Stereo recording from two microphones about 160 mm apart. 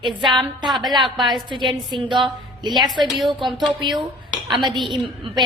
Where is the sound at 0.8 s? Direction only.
30° right (ahead or behind).